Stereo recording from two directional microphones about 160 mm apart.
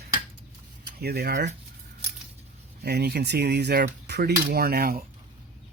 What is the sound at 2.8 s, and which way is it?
Cutlery, 90° right.